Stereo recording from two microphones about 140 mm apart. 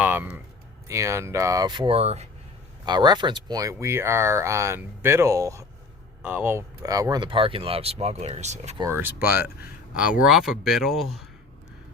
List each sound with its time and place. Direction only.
0.0 s speech: 10° right (ahead or behind); by 2.2 s 50° right (ahead or behind)
2.8 s speech: 30° right (ahead or behind); by 6.7 s 15° right (ahead or behind)
6.8 s speech: 25° right (ahead or behind); by 8.7 s 55° right (ahead or behind)
8.8 s speech: 15° right (ahead or behind)